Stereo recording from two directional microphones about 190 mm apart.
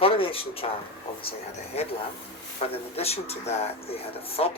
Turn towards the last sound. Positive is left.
turn(degrees=30)  # may be behind; listen again after turning